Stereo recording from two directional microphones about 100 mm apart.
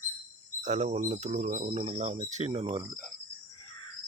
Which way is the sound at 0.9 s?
90° right.